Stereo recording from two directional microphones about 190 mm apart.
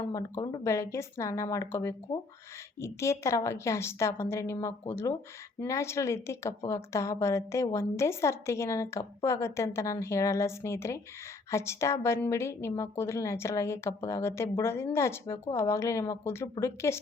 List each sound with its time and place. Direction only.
0.1 s a woman's voice: 15° left (ahead or behind)